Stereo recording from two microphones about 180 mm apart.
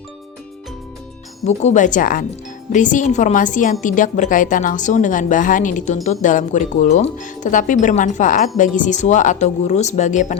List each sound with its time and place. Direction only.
1.5 s a woman's voice: 40° left (ahead or behind)